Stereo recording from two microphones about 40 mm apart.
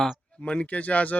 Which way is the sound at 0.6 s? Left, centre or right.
Left.